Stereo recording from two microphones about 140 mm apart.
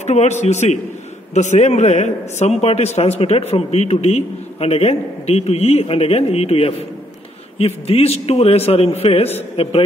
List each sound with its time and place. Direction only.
0.0 s a man's voice: 55° left (ahead or behind)